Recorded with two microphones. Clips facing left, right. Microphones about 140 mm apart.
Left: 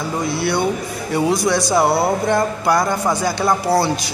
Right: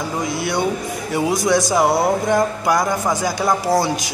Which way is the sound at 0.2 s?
15° right (ahead or behind).